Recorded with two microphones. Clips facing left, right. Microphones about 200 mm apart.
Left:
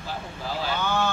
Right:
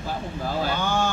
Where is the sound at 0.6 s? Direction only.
45° right (ahead or behind).